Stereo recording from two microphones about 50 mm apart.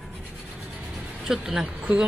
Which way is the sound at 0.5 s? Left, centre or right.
Centre.